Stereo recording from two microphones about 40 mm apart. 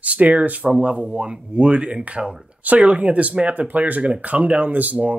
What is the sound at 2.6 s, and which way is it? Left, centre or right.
Speech, right.